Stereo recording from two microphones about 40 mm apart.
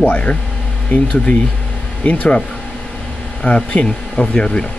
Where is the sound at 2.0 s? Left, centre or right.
Left.